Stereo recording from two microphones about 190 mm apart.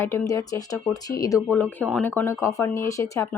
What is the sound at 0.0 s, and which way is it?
A woman's voice, 15° left (ahead or behind).